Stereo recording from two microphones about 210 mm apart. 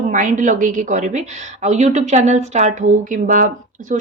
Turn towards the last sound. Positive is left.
turn(degrees=-40)  # may be behind; listen again after turning